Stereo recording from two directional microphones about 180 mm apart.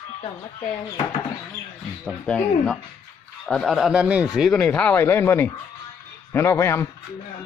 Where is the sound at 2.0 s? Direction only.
5° left (ahead or behind).